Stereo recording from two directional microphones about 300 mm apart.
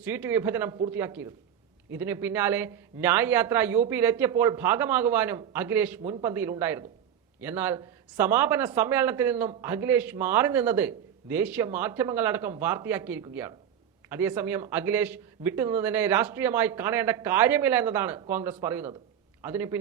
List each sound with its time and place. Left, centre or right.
0.0 s a man's voice: centre